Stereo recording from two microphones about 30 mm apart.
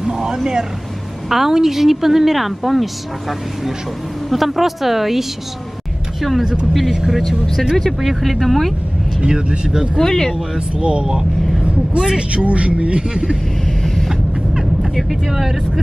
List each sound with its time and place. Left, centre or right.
0.0 s a sound: right
1.3 s a woman's voice: centre
6.4 s speech: right
6.7 s a woman's voice: centre
8.0 s a woman's voice: centre
9.2 s speech: right
9.9 s speech: centre
10.8 s speech: right
11.6 s vehicle: right
12.1 s speech: right
14.0 s vehicle: centre
15.0 s a woman's voice: centre